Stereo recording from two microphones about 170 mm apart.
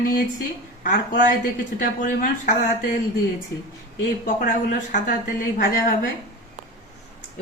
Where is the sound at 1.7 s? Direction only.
55° left (ahead or behind).